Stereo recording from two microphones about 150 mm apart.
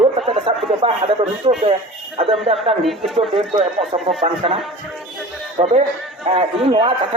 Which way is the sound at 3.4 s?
40° right (ahead or behind).